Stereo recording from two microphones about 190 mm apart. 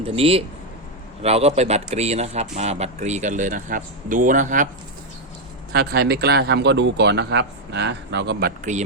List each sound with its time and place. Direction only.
0.0 s a man's voice: 30° right (ahead or behind)
5.7 s speech: 60° right (ahead or behind)